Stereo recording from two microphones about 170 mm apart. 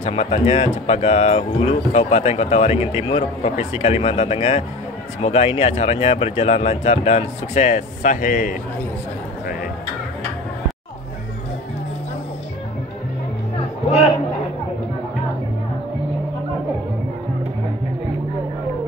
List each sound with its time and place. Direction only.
0.0 s speech: 40° left (ahead or behind)